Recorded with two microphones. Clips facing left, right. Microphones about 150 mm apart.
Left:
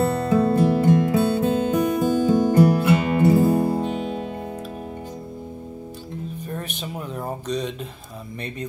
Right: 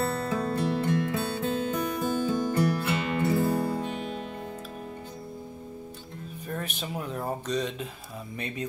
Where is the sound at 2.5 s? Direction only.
50° left (ahead or behind).